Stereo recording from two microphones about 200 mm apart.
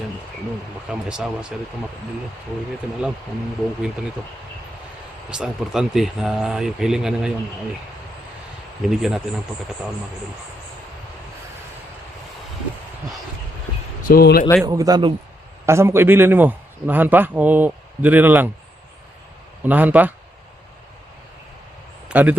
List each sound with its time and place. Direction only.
0.9 s speech: 5° right (ahead or behind)
5.3 s speech: 5° right (ahead or behind)
8.9 s speech: centre (ahead or behind)
14.0 s speech: 50° left (ahead or behind)
14.6 s a man's voice: 15° right (ahead or behind)
19.6 s a man's voice: 10° right (ahead or behind)
22.1 s a man's voice: 5° right (ahead or behind)